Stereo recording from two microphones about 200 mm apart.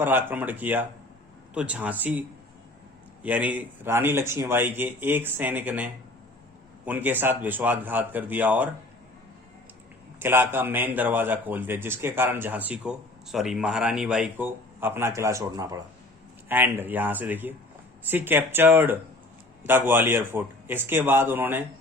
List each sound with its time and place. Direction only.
0.0 s a man's voice: 10° right (ahead or behind)
3.2 s a man's voice: 5° right (ahead or behind)
10.2 s a man's voice: 10° right (ahead or behind)